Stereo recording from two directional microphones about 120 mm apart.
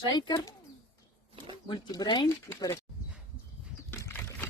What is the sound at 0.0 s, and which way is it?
Speech, 40° left (ahead or behind).